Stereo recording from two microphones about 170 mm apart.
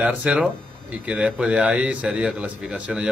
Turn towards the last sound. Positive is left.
turn(degrees=-5)  # may be behind; listen again after turning